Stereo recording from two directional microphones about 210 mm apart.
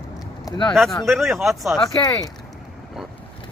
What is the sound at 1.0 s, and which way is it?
Speech, centre (ahead or behind).